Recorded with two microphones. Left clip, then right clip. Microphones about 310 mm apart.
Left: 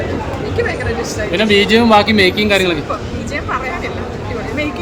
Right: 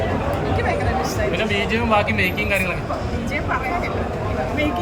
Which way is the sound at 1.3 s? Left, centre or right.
Left.